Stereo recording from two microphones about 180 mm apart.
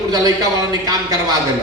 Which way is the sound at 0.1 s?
20° right (ahead or behind).